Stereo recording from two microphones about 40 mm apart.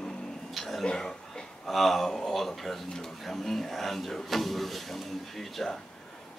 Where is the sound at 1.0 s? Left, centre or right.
Centre.